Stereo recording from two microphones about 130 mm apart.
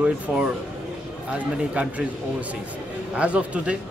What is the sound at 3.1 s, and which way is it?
Speech, 10° right (ahead or behind).